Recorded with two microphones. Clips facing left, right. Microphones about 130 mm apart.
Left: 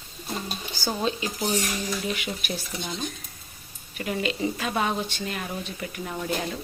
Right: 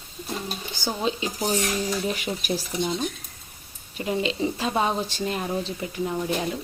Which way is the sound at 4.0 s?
25° right (ahead or behind).